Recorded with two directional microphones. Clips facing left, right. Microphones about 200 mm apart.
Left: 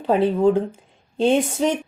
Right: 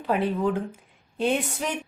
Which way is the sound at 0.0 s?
30° left (ahead or behind).